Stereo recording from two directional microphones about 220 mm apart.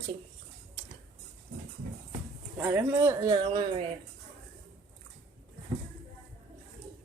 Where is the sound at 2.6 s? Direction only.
10° right (ahead or behind).